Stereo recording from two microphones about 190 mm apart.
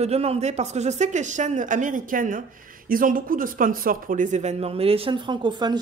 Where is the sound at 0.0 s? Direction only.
35° right (ahead or behind).